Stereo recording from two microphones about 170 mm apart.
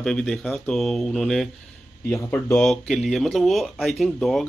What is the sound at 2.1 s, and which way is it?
Speech, 15° left (ahead or behind).